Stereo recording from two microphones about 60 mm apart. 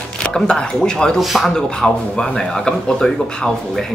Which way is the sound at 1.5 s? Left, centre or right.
Centre.